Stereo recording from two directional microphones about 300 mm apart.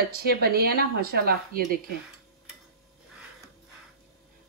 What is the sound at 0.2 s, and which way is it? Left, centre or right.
Speech, right.